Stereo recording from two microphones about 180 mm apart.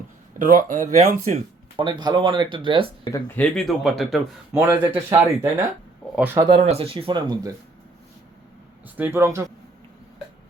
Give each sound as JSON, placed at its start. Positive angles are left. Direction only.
{"t": 0.3, "sound": "speech", "side_deg": -50}
{"t": 1.7, "sound": "speech", "side_deg": -25}
{"t": 3.0, "sound": "speech", "side_deg": 15}
{"t": 4.5, "sound": "speech", "side_deg": -10}
{"t": 6.5, "sound": "speech", "side_deg": -30}
{"t": 9.0, "sound": "speech", "side_deg": -15}